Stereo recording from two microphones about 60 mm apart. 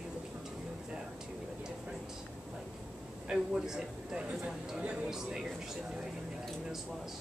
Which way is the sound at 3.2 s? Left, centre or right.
Centre.